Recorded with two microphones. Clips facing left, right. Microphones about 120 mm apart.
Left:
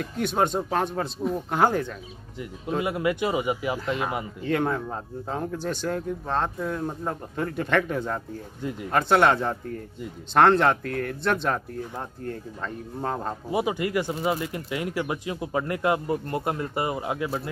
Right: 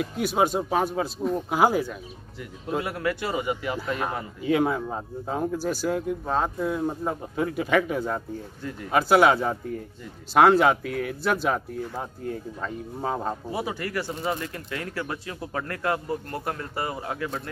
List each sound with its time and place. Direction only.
0.0 s speech: 5° right (ahead or behind)
2.8 s speech: 15° left (ahead or behind)
4.4 s speech: 5° right (ahead or behind)
13.5 s speech: 20° left (ahead or behind)